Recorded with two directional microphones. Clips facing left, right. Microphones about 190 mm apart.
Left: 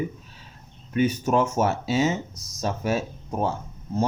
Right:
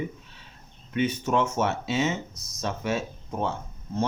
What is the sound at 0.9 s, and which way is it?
Speech, 40° left (ahead or behind).